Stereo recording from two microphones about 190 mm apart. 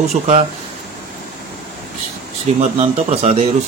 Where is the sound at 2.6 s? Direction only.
35° right (ahead or behind).